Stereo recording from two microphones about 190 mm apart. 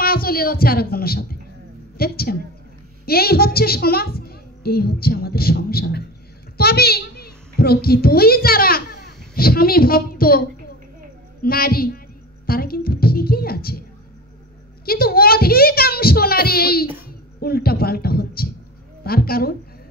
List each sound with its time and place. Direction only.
0.0 s a woman's voice: 50° left (ahead or behind)
11.4 s a woman's voice: 50° left (ahead or behind)
12.4 s music: 50° left (ahead or behind)
14.9 s a woman's voice: 50° left (ahead or behind)